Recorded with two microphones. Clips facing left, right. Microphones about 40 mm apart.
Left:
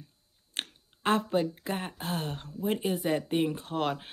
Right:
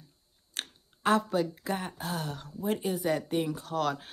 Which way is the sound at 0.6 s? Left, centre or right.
Left.